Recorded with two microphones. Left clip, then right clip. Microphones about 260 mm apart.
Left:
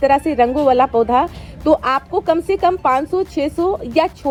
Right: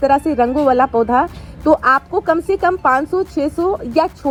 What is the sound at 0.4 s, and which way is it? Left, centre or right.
Speech, right.